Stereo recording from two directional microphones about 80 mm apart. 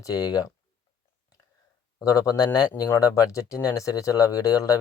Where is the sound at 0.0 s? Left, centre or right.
Left.